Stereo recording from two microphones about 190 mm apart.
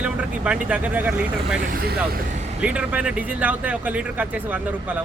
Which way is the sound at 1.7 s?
55° right (ahead or behind).